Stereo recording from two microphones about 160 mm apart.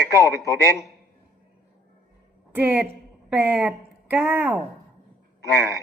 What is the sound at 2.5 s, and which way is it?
A woman's voice, 10° right (ahead or behind).